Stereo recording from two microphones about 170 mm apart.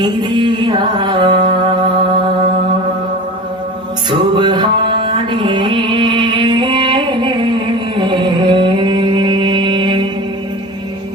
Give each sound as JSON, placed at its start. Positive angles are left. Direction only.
{"t": 0.0, "sound": "music", "side_deg": -25}
{"t": 4.1, "sound": "music", "side_deg": -25}